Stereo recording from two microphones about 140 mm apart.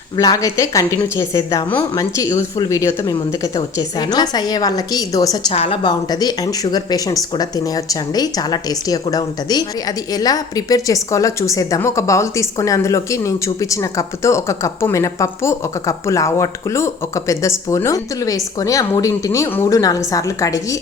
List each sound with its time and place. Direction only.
0.2 s speech: 25° left (ahead or behind)
5.5 s speech: 40° left (ahead or behind); by 20.7 s 25° left (ahead or behind)